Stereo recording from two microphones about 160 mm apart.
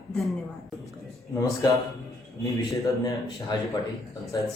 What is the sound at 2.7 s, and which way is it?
A man's voice, 20° left (ahead or behind).